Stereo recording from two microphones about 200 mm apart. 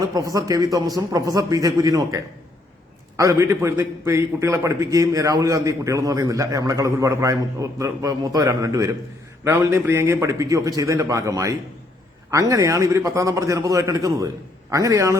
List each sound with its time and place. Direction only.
0.1 s a man's voice: 15° right (ahead or behind)
3.2 s a man's voice: 15° right (ahead or behind)